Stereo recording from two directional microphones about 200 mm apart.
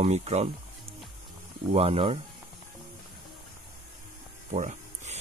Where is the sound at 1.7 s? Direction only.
30° right (ahead or behind).